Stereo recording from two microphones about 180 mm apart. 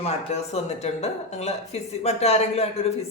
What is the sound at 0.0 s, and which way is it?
Speech, 35° left (ahead or behind).